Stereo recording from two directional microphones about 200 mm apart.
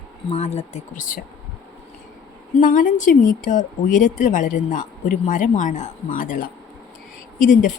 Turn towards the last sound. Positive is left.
turn(degrees=40)  # may be behind; listen again after turning